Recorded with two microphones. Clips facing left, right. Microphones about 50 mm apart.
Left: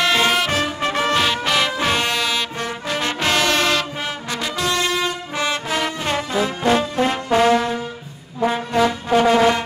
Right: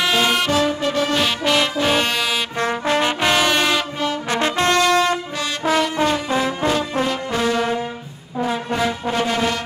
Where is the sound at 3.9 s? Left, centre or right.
Centre.